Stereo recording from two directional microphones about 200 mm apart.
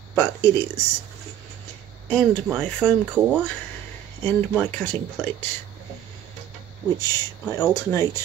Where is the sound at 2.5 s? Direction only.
Centre (ahead or behind).